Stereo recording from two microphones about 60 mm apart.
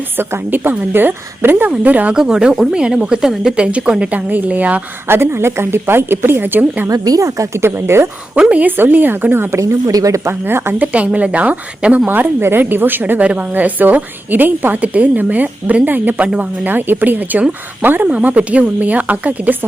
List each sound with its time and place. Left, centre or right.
0.2 s speech: right
2.1 s speech: centre
5.0 s speech: right
6.8 s a woman's voice: right
8.4 s speech: centre
8.6 s speech: right
9.6 s a woman's voice: right
10.4 s speech: right
10.9 s speech: right
12.0 s speech: right